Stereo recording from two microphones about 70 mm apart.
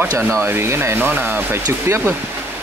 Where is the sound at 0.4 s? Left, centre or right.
Right.